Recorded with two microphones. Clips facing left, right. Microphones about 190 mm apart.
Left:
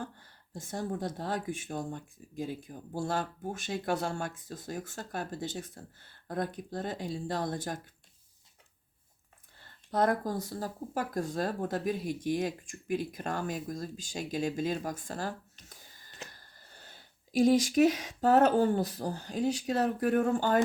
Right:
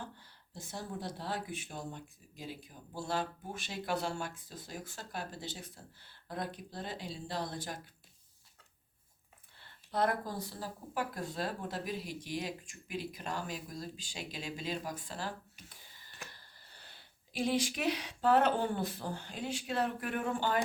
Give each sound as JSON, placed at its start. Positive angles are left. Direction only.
{"t": 0.0, "sound": "speech", "side_deg": 50}
{"t": 9.6, "sound": "speech", "side_deg": 45}
{"t": 15.6, "sound": "a sound", "side_deg": 45}
{"t": 16.3, "sound": "speech", "side_deg": 45}